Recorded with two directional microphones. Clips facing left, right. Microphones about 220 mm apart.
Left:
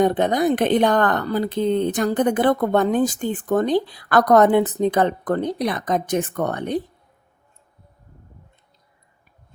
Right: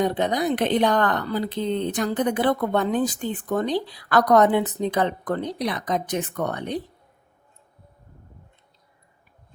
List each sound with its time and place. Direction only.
0.0 s speech: 50° left (ahead or behind)